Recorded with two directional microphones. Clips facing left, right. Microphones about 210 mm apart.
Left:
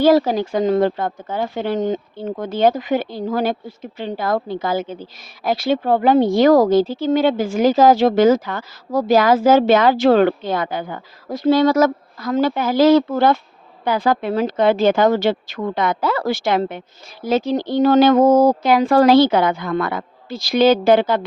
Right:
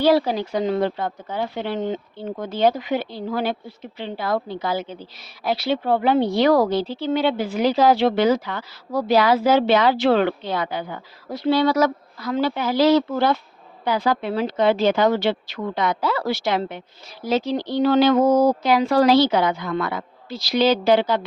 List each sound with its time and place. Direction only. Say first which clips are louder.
0.0 s speech: left 4 dB; 45° left (ahead or behind)